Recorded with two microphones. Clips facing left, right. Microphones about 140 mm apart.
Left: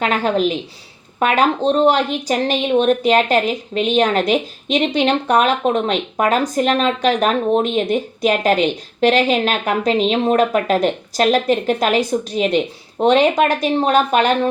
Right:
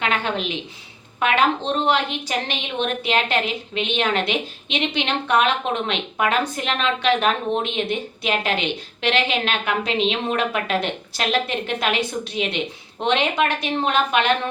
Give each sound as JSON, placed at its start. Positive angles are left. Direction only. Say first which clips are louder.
{"t": 0.0, "sound": "a woman's voice", "louder": "left 7 dB", "side_deg": 40}